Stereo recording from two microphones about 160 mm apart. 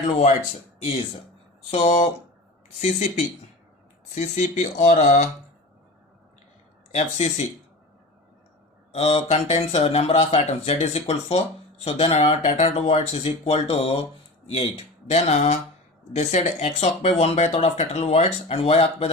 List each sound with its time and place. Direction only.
0.8 s speech: 40° left (ahead or behind)
4.1 s speech: 50° left (ahead or behind)
6.9 s speech: 45° left (ahead or behind)
8.9 s speech: 40° left (ahead or behind)